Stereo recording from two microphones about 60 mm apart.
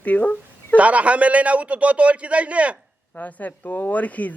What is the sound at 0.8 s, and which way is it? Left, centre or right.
A man's voice, right.